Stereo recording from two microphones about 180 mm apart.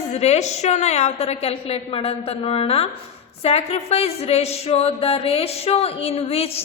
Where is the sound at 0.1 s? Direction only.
35° left (ahead or behind).